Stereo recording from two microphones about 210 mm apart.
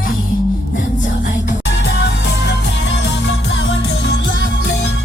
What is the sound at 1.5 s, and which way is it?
Music, 60° left (ahead or behind).